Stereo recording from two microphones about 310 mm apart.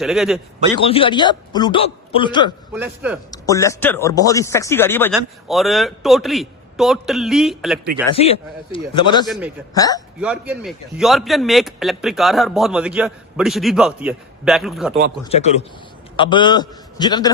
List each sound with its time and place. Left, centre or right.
0.0 s a man's voice: centre
0.9 s a man's voice: centre
2.7 s a man's voice: centre
3.5 s a man's voice: centre
8.2 s a man's voice: centre
9.2 s a man's voice: centre
9.7 s a man's voice: centre
10.2 s a man's voice: centre
15.2 s a man's voice: centre